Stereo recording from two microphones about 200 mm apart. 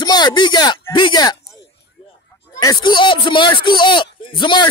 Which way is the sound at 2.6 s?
20° left (ahead or behind).